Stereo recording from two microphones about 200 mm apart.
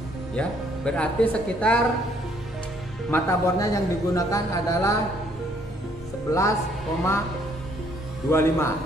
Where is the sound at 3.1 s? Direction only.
15° left (ahead or behind).